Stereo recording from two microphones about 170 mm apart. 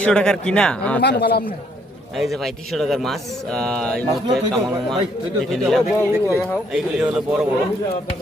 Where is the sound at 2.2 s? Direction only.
Centre (ahead or behind).